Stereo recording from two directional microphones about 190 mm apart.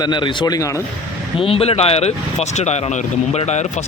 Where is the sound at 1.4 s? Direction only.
30° left (ahead or behind).